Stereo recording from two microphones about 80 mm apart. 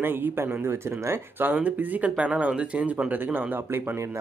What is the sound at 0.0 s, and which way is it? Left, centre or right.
Speech, right.